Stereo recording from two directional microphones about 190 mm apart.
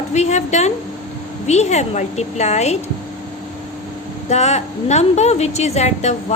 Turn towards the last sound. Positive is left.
turn(degrees=35)  # may be behind; listen again after turning